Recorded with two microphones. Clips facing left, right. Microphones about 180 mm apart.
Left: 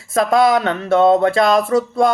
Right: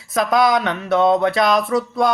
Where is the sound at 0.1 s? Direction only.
25° left (ahead or behind).